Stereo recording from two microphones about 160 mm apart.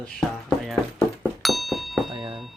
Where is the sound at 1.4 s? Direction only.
Centre (ahead or behind).